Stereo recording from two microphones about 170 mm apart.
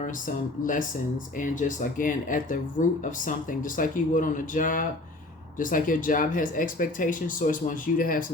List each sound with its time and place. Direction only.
0.0 s speech: 50° left (ahead or behind)